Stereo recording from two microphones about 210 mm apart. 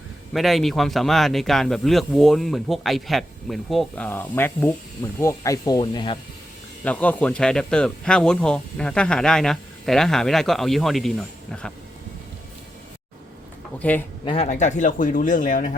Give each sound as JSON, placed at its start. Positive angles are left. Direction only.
{"t": 0.3, "sound": "speech", "side_deg": 0}
{"t": 6.8, "sound": "speech", "side_deg": 5}
{"t": 13.7, "sound": "speech", "side_deg": 5}
{"t": 14.3, "sound": "speech", "side_deg": 30}